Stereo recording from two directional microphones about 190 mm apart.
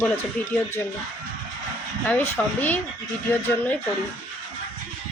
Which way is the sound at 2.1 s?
10° left (ahead or behind).